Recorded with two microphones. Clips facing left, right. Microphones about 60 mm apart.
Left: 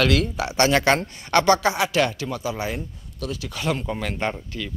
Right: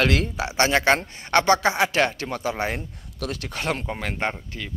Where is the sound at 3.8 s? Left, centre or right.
Right.